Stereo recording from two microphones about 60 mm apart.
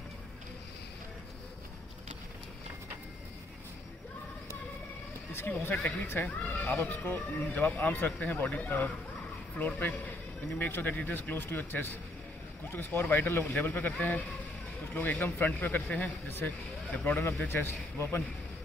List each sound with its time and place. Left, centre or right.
5.3 s speech: left